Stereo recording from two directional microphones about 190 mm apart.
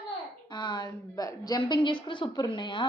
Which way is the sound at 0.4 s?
25° left (ahead or behind).